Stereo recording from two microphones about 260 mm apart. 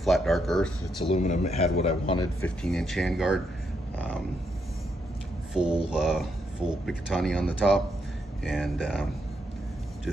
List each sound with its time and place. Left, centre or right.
0.0 s speech: centre
1.0 s speech: left
2.4 s speech: centre
5.5 s speech: centre